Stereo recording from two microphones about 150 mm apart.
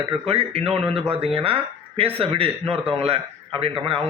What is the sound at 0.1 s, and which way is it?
Speech, 40° right (ahead or behind).